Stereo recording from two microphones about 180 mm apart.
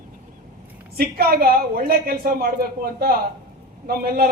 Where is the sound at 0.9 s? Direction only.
55° right (ahead or behind).